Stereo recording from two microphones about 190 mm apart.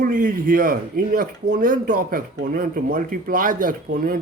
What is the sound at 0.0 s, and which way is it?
Speech, 45° right (ahead or behind).